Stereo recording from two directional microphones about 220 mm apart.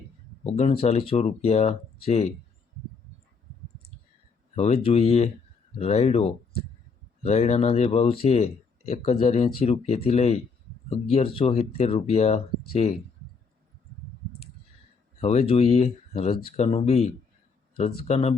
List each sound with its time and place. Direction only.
0.4 s speech: 30° left (ahead or behind)
4.5 s speech: 30° left (ahead or behind)
15.2 s speech: 30° left (ahead or behind)